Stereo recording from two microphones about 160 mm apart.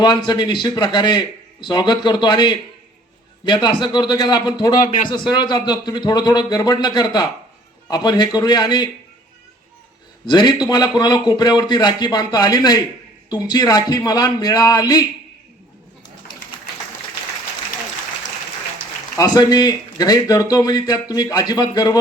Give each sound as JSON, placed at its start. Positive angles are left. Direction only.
{"t": 0.0, "sound": "speech", "side_deg": 30}
{"t": 10.2, "sound": "speech", "side_deg": 25}
{"t": 19.1, "sound": "speech", "side_deg": 25}